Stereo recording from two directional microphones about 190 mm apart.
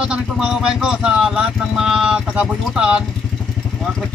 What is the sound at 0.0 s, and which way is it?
Speech, 5° right (ahead or behind).